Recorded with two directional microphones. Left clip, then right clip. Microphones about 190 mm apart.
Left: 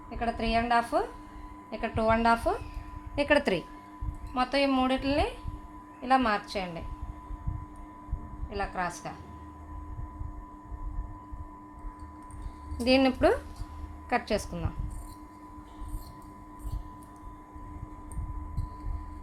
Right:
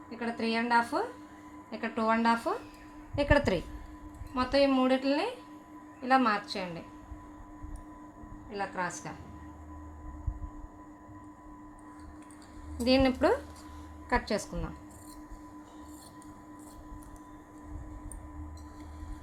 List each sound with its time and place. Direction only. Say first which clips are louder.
0.2 s speech: left 4 dB; 20° left (ahead or behind)
8.4 s speech: left 2 dB; 20° left (ahead or behind)
12.8 s speech: left 2 dB; 20° left (ahead or behind)